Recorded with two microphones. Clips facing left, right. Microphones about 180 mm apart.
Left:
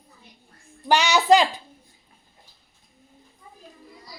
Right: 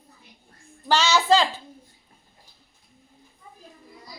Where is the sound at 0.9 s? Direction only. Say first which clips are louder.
Left 2 dB; 15° left (ahead or behind).